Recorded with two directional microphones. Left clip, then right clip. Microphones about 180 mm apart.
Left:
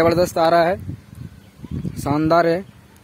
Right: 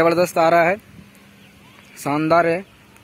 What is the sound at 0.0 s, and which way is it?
Speech, 10° left (ahead or behind).